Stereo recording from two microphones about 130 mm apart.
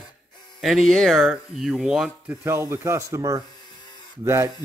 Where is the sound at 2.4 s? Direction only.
20° right (ahead or behind).